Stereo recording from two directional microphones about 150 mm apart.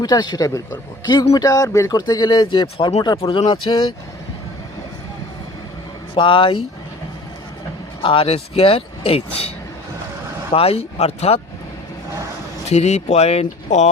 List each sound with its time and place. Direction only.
0.0 s speech: 25° left (ahead or behind)
2.7 s speech: 40° left (ahead or behind)
6.1 s speech: 35° left (ahead or behind)
8.0 s speech: 35° left (ahead or behind)
10.5 s speech: 40° left (ahead or behind)
12.6 s speech: 45° left (ahead or behind)